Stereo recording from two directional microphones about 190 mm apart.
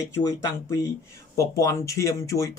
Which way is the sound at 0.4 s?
15° left (ahead or behind).